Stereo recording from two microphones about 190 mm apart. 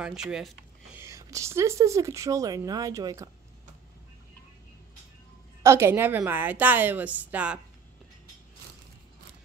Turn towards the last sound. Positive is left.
turn(degrees=-5)  # may be behind; listen again after turning